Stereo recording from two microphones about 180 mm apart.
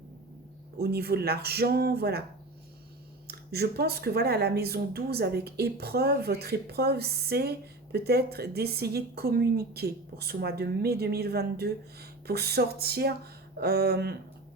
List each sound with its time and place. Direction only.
0.8 s speech: 60° right (ahead or behind)
3.2 s speech: 60° right (ahead or behind)